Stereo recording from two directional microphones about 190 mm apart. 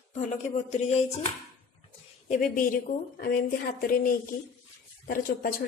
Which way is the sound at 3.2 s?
50° left (ahead or behind).